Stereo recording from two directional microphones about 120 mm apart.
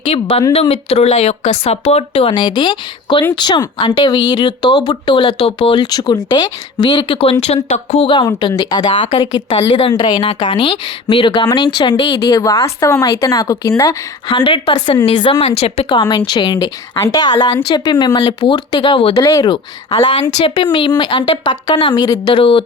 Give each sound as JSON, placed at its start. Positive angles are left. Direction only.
{"t": 0.0, "sound": "speech", "side_deg": 55}
{"t": 8.0, "sound": "speech", "side_deg": 40}
{"t": 14.3, "sound": "speech", "side_deg": 45}
{"t": 15.9, "sound": "speech", "side_deg": 35}
{"t": 19.2, "sound": "speech", "side_deg": 30}
{"t": 20.2, "sound": "speech", "side_deg": 40}